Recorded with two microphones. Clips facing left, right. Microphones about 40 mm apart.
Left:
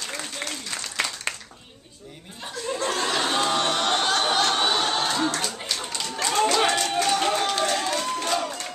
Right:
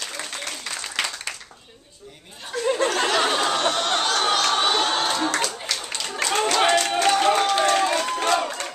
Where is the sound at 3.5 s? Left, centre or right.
Centre.